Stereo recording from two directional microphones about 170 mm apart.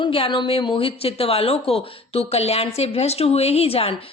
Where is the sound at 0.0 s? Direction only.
30° left (ahead or behind).